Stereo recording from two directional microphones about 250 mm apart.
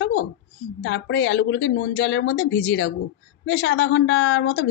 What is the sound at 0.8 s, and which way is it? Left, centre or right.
Speech, left.